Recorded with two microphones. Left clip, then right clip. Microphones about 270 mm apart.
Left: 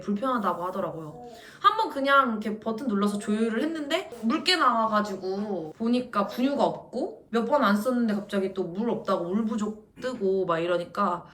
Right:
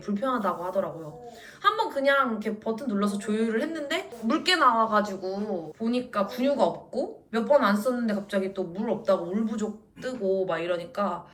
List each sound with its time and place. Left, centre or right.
0.0 s a woman's voice: centre